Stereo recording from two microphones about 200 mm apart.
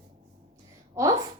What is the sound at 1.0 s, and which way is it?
Speech, 15° right (ahead or behind).